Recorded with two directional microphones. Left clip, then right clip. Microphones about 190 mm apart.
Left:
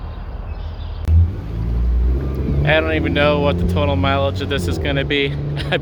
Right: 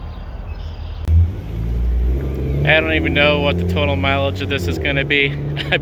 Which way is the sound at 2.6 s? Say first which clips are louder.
Right 2 dB; 5° left (ahead or behind).